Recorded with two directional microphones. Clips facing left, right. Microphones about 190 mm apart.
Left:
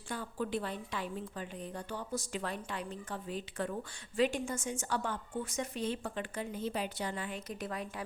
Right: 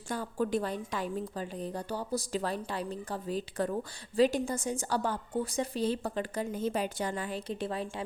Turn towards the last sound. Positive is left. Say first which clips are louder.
# right 5 dB
turn(degrees=-30)  # may be behind; listen again after turning